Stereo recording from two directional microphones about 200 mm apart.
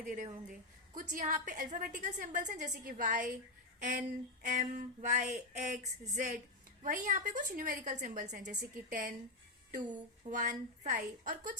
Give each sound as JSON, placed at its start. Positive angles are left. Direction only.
{"t": 0.0, "sound": "a woman's voice", "side_deg": -40}
{"t": 10.2, "sound": "a woman's voice", "side_deg": -40}